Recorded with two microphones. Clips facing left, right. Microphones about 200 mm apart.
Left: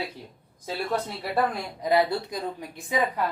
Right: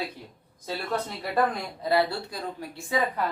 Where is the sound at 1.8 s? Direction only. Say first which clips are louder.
Left 2 dB; 15° left (ahead or behind).